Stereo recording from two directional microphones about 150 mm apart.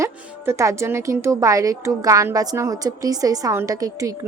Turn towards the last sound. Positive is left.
turn(degrees=-20)  # may be behind; listen again after turning